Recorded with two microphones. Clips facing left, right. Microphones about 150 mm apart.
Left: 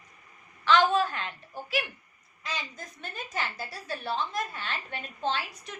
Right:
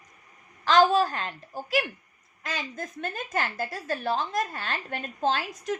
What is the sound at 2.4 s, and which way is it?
A woman's voice, 50° right (ahead or behind).